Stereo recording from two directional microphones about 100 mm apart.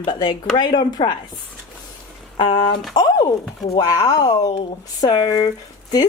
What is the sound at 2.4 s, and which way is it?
Speech, 60° left (ahead or behind).